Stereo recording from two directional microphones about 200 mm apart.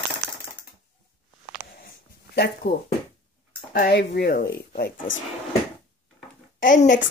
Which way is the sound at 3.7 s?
50° left (ahead or behind).